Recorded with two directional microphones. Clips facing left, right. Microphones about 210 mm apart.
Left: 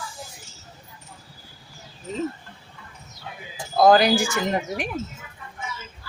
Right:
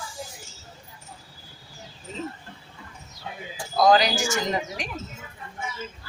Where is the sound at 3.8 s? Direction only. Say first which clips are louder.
Left 3 dB; 55° left (ahead or behind).